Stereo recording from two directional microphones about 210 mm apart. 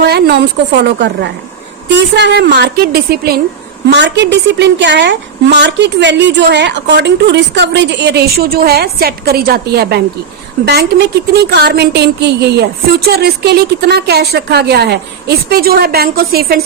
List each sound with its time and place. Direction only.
0.0 s a woman's voice: 50° right (ahead or behind)